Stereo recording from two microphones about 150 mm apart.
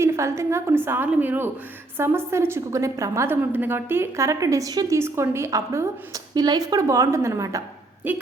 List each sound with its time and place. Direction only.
0.0 s a woman's voice: 20° right (ahead or behind)